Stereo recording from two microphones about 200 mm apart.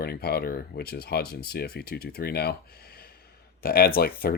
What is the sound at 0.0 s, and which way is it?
Speech, 55° left (ahead or behind).